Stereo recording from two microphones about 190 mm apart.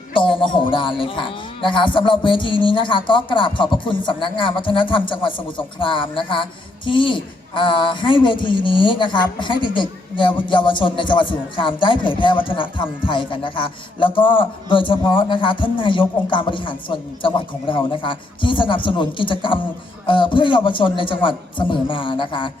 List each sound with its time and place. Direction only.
0.1 s music: 25° left (ahead or behind)
0.7 s a man's voice: 25° left (ahead or behind)